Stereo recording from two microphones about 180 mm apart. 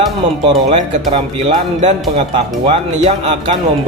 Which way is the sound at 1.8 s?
40° right (ahead or behind).